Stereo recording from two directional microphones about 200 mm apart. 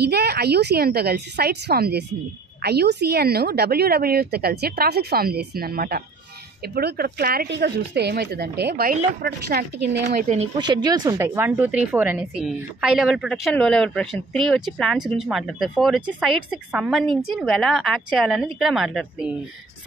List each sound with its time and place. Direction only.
0.1 s speech: 55° right (ahead or behind)
10.0 s speech: 35° right (ahead or behind)
10.6 s speech: 20° right (ahead or behind); by 19.3 s 5° right (ahead or behind)